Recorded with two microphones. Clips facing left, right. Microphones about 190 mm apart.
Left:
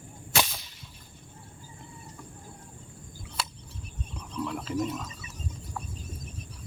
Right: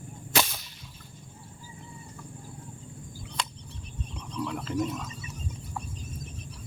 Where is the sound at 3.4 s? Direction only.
5° left (ahead or behind).